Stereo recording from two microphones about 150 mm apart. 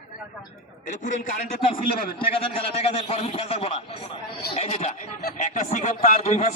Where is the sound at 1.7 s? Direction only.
35° left (ahead or behind).